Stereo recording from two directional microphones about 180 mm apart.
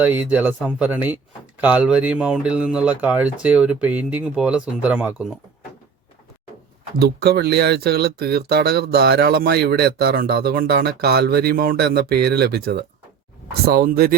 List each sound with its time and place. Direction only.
0.0 s speech: 10° right (ahead or behind)
7.0 s speech: 60° right (ahead or behind)